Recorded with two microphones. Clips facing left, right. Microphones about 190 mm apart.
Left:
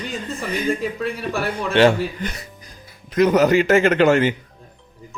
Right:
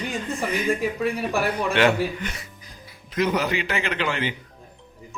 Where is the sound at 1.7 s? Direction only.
30° left (ahead or behind).